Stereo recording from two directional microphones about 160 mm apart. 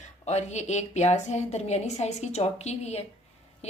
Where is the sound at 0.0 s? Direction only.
45° left (ahead or behind).